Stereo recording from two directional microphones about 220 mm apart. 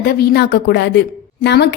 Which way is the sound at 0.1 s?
45° left (ahead or behind).